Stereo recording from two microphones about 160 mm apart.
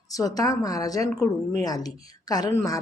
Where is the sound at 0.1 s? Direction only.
20° left (ahead or behind).